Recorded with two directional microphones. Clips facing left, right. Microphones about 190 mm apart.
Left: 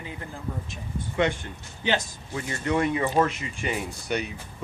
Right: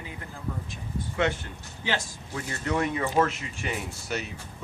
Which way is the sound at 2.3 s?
10° left (ahead or behind).